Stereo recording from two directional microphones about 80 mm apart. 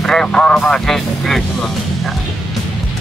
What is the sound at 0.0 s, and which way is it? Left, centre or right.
Vehicle, centre.